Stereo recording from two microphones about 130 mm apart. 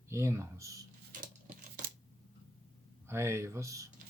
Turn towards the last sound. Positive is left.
turn(degrees=-25)  # may be behind; listen again after turning